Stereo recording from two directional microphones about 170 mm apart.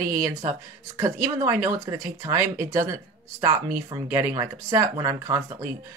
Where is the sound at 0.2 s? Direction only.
20° right (ahead or behind).